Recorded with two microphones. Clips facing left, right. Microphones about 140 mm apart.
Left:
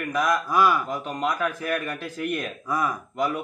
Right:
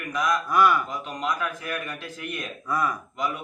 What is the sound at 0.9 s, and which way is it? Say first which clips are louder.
A man's voice: left 3 dB; 50° left (ahead or behind).